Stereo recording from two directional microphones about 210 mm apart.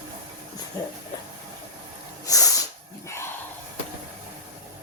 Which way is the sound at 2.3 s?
15° left (ahead or behind).